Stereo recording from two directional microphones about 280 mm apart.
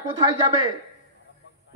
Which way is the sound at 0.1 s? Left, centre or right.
Centre.